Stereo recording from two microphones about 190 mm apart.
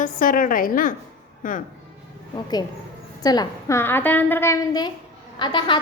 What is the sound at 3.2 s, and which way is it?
A woman's voice, 20° left (ahead or behind).